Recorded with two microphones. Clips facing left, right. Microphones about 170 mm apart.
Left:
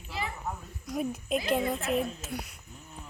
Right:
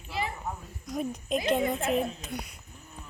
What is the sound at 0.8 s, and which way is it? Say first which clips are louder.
A woman's voice: even; 5° left (ahead or behind).